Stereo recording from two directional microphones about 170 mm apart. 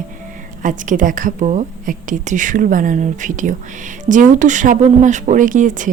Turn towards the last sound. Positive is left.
turn(degrees=-50)  # may be behind; listen again after turning